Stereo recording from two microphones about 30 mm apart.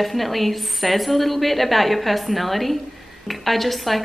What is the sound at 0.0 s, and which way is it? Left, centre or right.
A woman's voice, centre.